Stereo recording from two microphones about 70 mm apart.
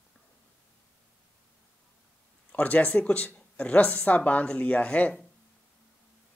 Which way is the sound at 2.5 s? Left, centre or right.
Left.